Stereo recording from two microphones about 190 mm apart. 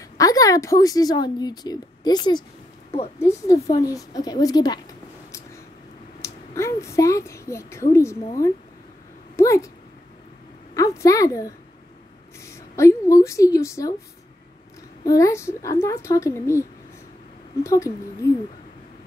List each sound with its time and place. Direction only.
0.2 s a woman's voice: 20° left (ahead or behind)
6.2 s a sound: 15° left (ahead or behind)
6.8 s a woman's voice: 15° left (ahead or behind)
10.7 s a woman's voice: 15° left (ahead or behind)
15.0 s a woman's voice: 15° left (ahead or behind)
17.6 s a woman's voice: 15° left (ahead or behind)